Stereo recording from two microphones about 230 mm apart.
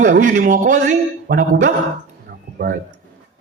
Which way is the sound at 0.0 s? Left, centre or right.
Right.